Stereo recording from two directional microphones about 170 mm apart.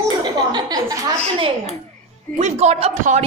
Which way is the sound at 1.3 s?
35° right (ahead or behind).